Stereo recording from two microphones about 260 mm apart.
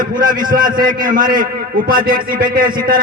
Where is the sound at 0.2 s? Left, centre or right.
Right.